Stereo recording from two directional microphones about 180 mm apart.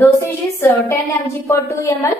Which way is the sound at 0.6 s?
10° left (ahead or behind).